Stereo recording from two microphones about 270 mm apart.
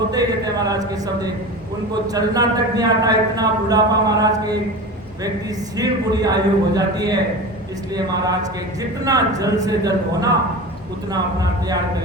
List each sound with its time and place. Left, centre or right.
0.1 s speech: centre
5.7 s speech: centre
9.4 s speech: centre